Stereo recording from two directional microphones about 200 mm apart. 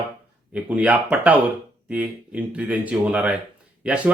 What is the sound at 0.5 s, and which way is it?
A man's voice, 5° right (ahead or behind).